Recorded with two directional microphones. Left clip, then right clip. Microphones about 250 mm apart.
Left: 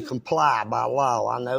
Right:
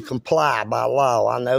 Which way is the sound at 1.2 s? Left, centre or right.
Right.